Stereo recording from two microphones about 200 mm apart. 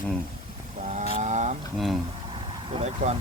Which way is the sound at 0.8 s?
35° right (ahead or behind).